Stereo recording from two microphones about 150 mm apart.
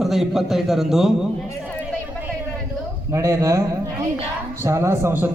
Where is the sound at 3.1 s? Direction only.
20° right (ahead or behind).